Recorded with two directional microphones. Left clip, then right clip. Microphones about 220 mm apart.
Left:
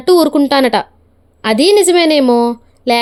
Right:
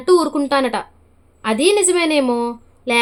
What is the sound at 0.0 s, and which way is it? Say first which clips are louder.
A woman's voice: left 5 dB; 30° left (ahead or behind).